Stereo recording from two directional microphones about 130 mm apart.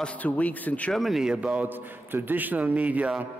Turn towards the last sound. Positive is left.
turn(degrees=-10)  # may be behind; listen again after turning